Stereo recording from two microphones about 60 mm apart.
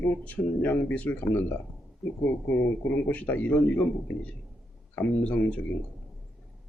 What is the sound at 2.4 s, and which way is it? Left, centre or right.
Speech, left.